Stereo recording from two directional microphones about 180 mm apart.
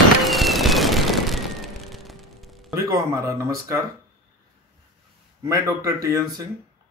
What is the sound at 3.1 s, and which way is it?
Speech, 15° right (ahead or behind).